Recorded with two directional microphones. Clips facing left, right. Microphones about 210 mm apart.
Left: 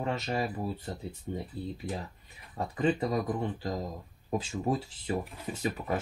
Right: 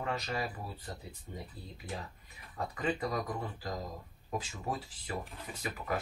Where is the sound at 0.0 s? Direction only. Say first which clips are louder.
Left 5 dB; 25° left (ahead or behind).